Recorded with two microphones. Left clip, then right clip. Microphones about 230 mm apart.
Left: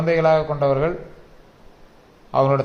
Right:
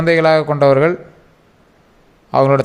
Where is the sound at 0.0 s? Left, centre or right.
Right.